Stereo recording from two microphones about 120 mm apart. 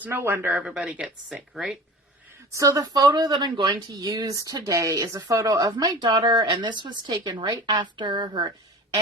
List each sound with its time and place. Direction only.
0.0 s speech: 20° right (ahead or behind); by 1.8 s 5° right (ahead or behind)
2.5 s speech: 25° right (ahead or behind); by 8.5 s 40° right (ahead or behind)